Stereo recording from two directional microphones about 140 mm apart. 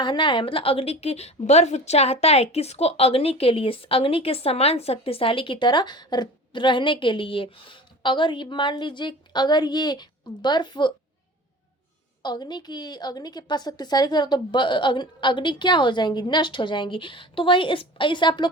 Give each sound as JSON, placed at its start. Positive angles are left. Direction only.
{"t": 0.0, "sound": "a woman's voice", "side_deg": 35}
{"t": 12.2, "sound": "a woman's voice", "side_deg": 30}